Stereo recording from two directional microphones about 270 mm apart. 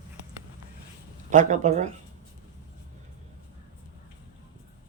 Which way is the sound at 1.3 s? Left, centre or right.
Right.